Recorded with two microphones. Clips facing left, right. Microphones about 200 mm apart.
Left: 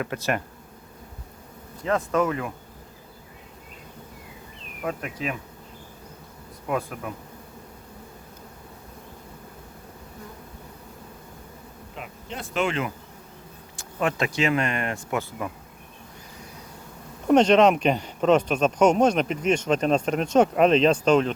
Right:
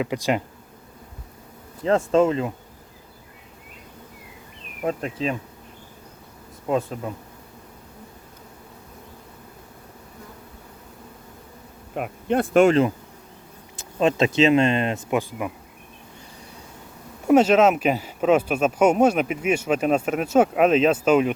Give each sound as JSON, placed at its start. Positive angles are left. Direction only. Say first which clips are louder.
{"t": 0.0, "sound": "speech", "louder": "right 4 dB", "side_deg": -15}
{"t": 1.8, "sound": "speech", "louder": "right 5 dB", "side_deg": -25}
{"t": 4.8, "sound": "speech", "louder": "right 5 dB", "side_deg": -30}
{"t": 6.7, "sound": "speech", "louder": "right 4 dB", "side_deg": -25}
{"t": 11.9, "sound": "speech", "louder": "right 14 dB", "side_deg": -55}
{"t": 13.7, "sound": "speech", "louder": "right 6 dB", "side_deg": -20}
{"t": 17.2, "sound": "speech", "louder": "right 1 dB", "side_deg": -5}